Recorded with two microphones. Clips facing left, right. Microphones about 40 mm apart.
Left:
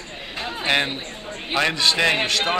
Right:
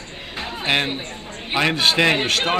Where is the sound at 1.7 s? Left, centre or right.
Right.